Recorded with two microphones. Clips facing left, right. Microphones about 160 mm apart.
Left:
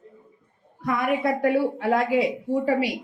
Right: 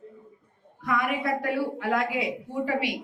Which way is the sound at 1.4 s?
35° left (ahead or behind).